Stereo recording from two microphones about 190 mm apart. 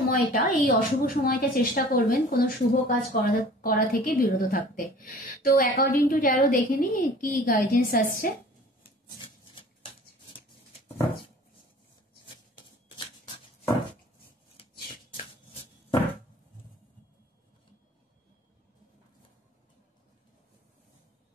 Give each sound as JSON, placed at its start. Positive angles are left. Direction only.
{"t": 0.1, "sound": "a woman's voice", "side_deg": 45}
{"t": 8.8, "sound": "filing", "side_deg": 25}
{"t": 14.6, "sound": "a sound", "side_deg": 30}